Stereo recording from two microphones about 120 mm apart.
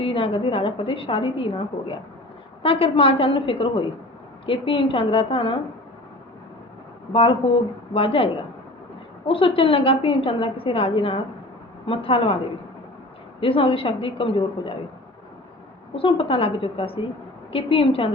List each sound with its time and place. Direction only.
0.0 s a woman's voice: 50° left (ahead or behind)
7.1 s a woman's voice: 50° left (ahead or behind)
13.4 s a woman's voice: 50° left (ahead or behind)
16.0 s a woman's voice: 50° left (ahead or behind)